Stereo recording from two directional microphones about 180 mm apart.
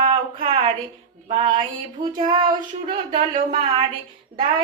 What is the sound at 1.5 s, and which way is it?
Child singing, 25° right (ahead or behind).